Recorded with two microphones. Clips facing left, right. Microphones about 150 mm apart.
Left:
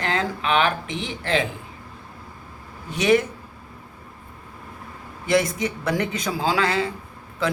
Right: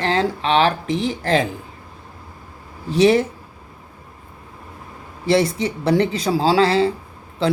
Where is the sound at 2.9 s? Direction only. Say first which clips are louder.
Right 4 dB; 30° right (ahead or behind).